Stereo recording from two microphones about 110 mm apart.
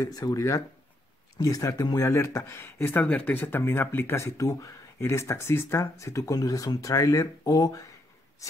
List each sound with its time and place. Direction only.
0.0 s speech: 35° left (ahead or behind)